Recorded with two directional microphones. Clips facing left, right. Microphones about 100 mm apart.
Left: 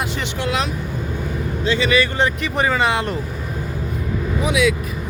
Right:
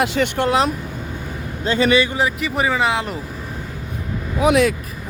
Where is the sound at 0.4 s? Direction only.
35° right (ahead or behind).